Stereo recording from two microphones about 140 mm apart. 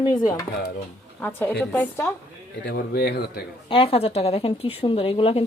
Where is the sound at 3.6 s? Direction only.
40° left (ahead or behind).